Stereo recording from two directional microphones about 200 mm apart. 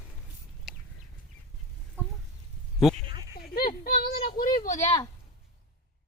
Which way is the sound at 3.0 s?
50° left (ahead or behind).